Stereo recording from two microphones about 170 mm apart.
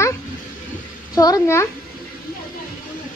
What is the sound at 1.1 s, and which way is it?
Speech, 20° left (ahead or behind).